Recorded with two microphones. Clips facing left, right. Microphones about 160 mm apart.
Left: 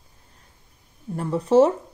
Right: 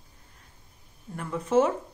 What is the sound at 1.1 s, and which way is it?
Speech, 35° left (ahead or behind).